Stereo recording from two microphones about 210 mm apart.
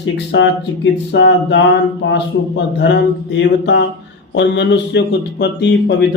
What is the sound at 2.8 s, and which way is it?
Speech, 60° left (ahead or behind).